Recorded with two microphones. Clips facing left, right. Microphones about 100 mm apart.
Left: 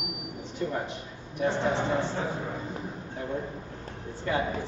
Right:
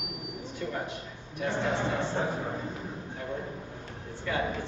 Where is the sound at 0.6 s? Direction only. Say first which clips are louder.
Left 4 dB; 30° left (ahead or behind).